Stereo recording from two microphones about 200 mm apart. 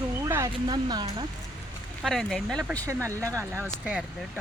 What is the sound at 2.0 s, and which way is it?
Speech, centre (ahead or behind).